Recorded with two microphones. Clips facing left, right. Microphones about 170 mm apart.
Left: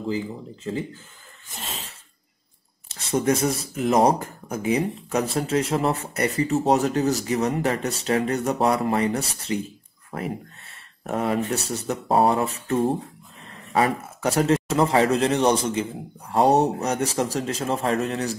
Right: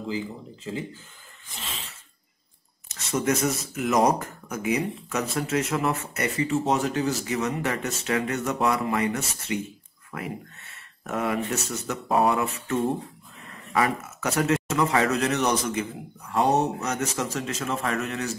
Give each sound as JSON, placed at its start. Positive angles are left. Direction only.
{"t": 1.5, "sound": "a sound", "side_deg": 40}
{"t": 2.9, "sound": "speech", "side_deg": 30}
{"t": 13.7, "sound": "speech", "side_deg": 30}